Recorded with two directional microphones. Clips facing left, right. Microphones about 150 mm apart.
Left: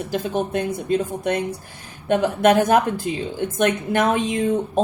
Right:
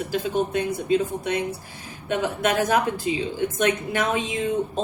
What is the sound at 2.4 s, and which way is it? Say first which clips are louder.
Speech: left 6 dB; 50° left (ahead or behind).